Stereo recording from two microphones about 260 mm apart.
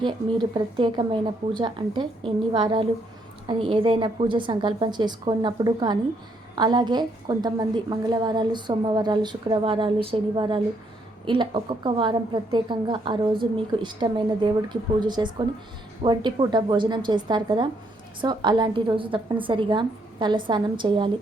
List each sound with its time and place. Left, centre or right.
0.5 s a woman's voice: centre